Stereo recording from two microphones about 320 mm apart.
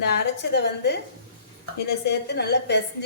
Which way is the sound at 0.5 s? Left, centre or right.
Left.